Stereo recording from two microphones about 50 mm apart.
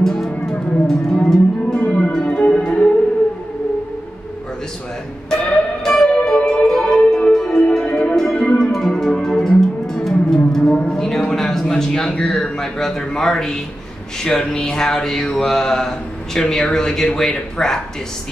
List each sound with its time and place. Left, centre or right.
0.0 s music: centre
1.7 s music: centre
5.3 s music: centre
10.7 s a sound: centre
14.2 s mantra: centre